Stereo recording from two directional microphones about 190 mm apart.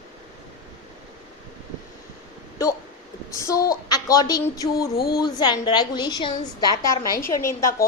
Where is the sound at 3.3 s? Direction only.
15° left (ahead or behind).